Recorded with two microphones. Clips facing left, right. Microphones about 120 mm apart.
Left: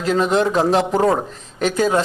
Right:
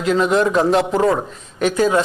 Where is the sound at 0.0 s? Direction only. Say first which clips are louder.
Right 1 dB; 35° left (ahead or behind).